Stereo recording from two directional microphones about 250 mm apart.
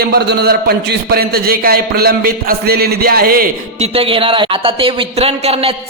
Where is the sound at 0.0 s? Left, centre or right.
Right.